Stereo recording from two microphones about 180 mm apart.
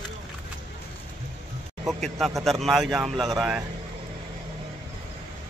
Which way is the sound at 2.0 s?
Centre (ahead or behind).